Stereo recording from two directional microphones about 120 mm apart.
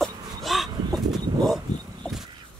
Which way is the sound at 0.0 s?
Centre (ahead or behind).